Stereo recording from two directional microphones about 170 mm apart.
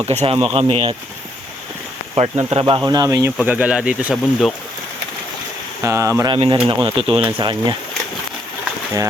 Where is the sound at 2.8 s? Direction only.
20° right (ahead or behind).